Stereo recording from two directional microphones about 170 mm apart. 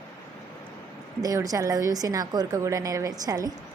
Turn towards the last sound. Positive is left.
turn(degrees=-20)  # may be behind; listen again after turning